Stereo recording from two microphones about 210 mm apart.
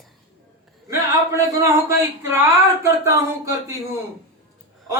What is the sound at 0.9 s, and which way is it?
A man's voice, 15° right (ahead or behind).